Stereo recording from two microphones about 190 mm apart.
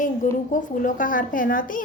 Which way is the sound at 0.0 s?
45° left (ahead or behind).